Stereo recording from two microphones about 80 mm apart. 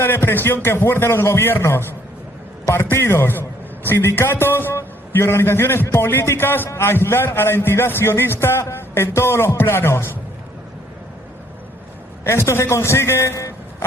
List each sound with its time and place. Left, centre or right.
0.0 s a man's voice: left
12.2 s a man's voice: left